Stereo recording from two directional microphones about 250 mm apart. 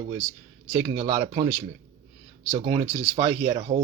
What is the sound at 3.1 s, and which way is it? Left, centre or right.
Speech, right.